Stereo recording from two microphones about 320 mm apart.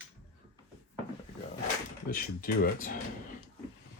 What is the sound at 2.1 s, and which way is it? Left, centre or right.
Speech, left.